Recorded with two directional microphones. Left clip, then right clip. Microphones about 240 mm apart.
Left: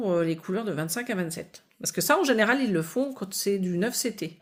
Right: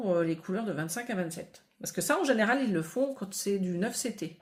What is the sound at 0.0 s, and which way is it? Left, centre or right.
Speech, left.